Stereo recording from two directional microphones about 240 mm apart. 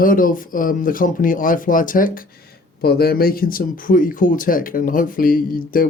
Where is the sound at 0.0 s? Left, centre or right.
Left.